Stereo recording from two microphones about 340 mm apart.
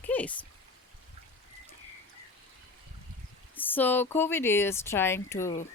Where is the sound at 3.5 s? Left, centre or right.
Centre.